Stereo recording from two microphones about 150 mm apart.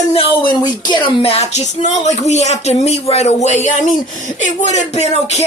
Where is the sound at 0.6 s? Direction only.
30° left (ahead or behind).